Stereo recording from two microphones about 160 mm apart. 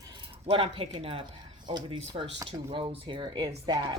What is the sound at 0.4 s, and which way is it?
Speech, 40° right (ahead or behind).